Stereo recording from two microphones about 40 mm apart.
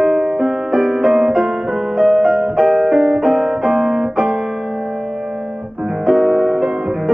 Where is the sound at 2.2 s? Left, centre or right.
Centre.